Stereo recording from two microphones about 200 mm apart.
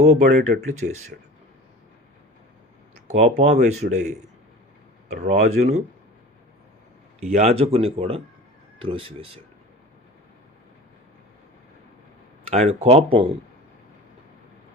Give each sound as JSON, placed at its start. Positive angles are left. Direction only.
{"t": 0.0, "sound": "speech", "side_deg": -35}
{"t": 3.1, "sound": "speech", "side_deg": -35}
{"t": 7.2, "sound": "a man's voice", "side_deg": -35}
{"t": 12.5, "sound": "speech", "side_deg": -30}